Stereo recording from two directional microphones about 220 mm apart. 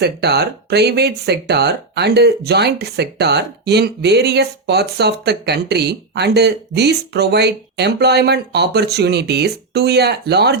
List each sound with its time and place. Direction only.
0.0 s speech: 50° right (ahead or behind)